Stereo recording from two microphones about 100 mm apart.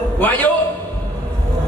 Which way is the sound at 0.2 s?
15° left (ahead or behind).